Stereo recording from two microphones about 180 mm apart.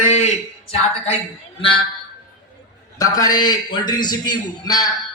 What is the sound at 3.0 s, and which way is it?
A man's voice, 20° left (ahead or behind).